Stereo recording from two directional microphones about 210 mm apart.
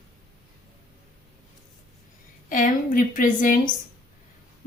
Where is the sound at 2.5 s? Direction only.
40° left (ahead or behind).